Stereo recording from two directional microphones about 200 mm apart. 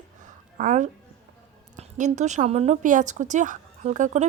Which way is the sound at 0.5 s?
35° right (ahead or behind).